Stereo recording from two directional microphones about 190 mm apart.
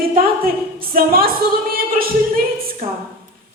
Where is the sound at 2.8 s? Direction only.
50° right (ahead or behind).